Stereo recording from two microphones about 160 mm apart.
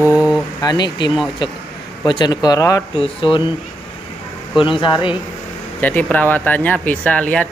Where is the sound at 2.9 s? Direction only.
35° left (ahead or behind).